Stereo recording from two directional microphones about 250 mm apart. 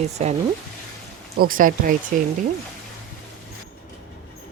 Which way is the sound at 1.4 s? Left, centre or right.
Right.